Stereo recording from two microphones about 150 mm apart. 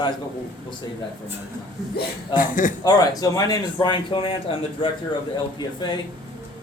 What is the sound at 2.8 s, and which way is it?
Speech, 25° left (ahead or behind).